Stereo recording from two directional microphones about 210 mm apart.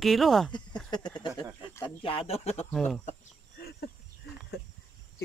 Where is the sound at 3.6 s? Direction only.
50° left (ahead or behind).